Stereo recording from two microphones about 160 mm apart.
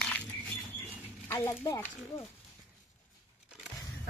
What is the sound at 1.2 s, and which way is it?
Speech, 15° left (ahead or behind).